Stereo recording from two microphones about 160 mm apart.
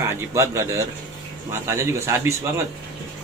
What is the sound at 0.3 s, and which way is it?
A man's voice, 20° right (ahead or behind).